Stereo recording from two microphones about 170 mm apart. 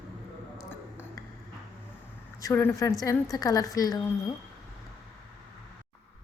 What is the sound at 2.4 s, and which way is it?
A woman's voice, 15° left (ahead or behind).